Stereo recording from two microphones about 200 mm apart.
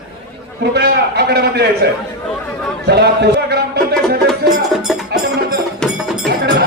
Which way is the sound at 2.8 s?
55° right (ahead or behind).